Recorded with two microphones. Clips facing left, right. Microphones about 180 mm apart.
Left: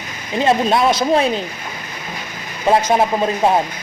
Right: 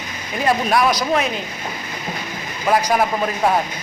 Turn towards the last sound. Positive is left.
turn(degrees=25)  # may be behind; listen again after turning